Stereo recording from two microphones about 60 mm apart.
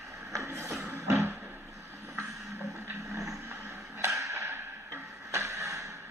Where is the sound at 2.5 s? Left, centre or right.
Right.